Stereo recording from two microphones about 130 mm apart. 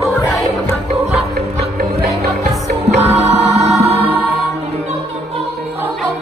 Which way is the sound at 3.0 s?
55° right (ahead or behind).